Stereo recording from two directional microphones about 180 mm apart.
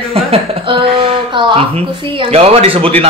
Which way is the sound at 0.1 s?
30° right (ahead or behind).